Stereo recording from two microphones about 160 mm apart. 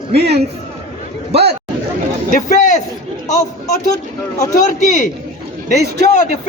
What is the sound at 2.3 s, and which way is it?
Speech, 50° left (ahead or behind).